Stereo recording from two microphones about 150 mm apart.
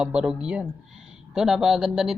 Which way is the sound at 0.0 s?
5° right (ahead or behind).